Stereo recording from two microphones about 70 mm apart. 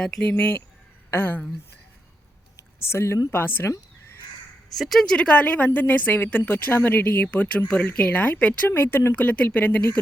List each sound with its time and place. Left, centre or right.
0.2 s a woman's voice: left
2.6 s a sound: left
3.3 s a woman's voice: left
4.7 s speech: centre
5.1 s a woman's voice: centre; by 9.1 s left
9.1 s a woman's voice: left